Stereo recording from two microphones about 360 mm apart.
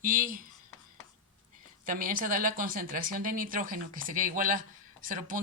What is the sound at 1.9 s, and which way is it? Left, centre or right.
A woman's voice, right.